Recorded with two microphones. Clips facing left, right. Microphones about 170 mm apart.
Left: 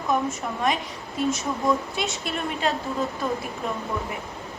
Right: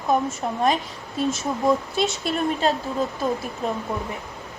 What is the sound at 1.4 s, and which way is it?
Speech, 25° right (ahead or behind).